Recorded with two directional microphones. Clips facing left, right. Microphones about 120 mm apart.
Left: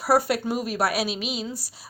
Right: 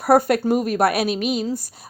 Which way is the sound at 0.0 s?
50° right (ahead or behind).